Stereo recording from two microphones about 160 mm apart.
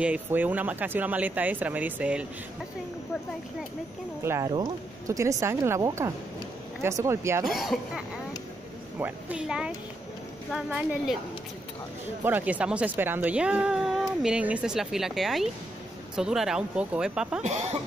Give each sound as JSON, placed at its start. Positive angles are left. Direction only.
{"t": 0.0, "sound": "speech", "side_deg": -10}
{"t": 4.2, "sound": "speech", "side_deg": -20}
{"t": 7.4, "sound": "speech", "side_deg": 0}
{"t": 9.0, "sound": "speech", "side_deg": -5}
{"t": 12.2, "sound": "speech", "side_deg": -10}
{"t": 17.4, "sound": "speech", "side_deg": -40}